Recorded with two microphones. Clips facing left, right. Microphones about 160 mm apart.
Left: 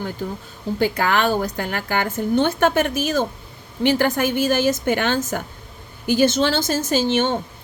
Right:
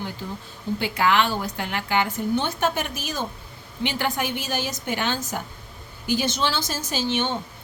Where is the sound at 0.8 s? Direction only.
45° left (ahead or behind).